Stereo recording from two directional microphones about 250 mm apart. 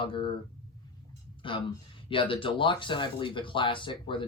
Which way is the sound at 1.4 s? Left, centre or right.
Centre.